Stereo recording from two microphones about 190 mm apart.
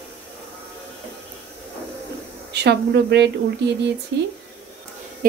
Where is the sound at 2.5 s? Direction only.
60° right (ahead or behind).